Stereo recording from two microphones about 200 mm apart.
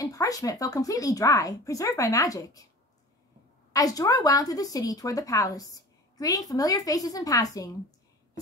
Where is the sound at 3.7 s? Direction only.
20° left (ahead or behind).